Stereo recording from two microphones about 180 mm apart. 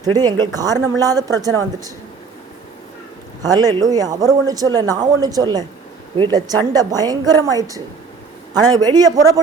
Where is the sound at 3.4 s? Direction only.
20° right (ahead or behind).